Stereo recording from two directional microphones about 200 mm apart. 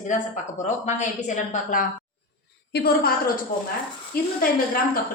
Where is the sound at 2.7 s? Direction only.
55° left (ahead or behind).